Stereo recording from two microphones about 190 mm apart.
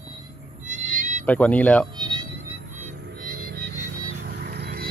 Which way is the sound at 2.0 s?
25° right (ahead or behind).